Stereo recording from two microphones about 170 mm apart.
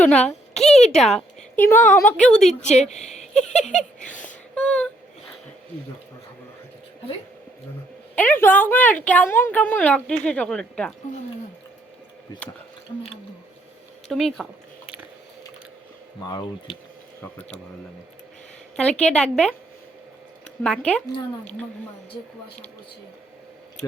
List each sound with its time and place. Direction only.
0.0 s a woman's voice: 10° left (ahead or behind)
0.6 s a sound: 40° left (ahead or behind)
0.9 s a woman's voice: centre (ahead or behind)
2.4 s speech: 40° left (ahead or behind)
4.0 s a sound: 10° left (ahead or behind)
4.5 s a woman's voice: 10° left (ahead or behind)
8.1 s a woman's voice: 10° left (ahead or behind)
14.1 s speech: centre (ahead or behind)
16.2 s speech: 25° left (ahead or behind)
18.8 s a woman's voice: 5° left (ahead or behind)
20.7 s a woman's voice: 5° left (ahead or behind)